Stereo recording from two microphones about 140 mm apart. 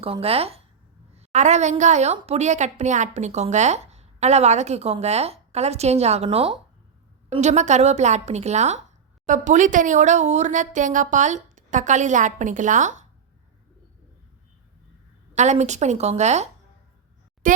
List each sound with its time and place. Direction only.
0.0 s a woman's voice: 45° right (ahead or behind)
1.1 s a sound: 55° right (ahead or behind)
1.8 s a woman's voice: 55° right (ahead or behind); by 6.6 s 40° right (ahead or behind)
7.3 s a woman's voice: 55° right (ahead or behind)
15.4 s a woman's voice: 55° right (ahead or behind)
17.4 s speech: 70° right (ahead or behind)